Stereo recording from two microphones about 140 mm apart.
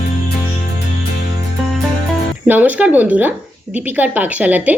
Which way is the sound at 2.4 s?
10° right (ahead or behind).